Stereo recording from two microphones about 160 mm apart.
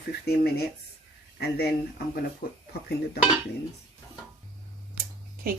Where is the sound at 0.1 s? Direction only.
85° left.